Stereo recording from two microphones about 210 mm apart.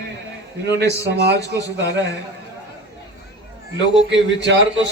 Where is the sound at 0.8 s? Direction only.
55° right (ahead or behind).